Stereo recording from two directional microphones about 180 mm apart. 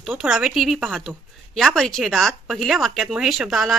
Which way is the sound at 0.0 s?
5° right (ahead or behind).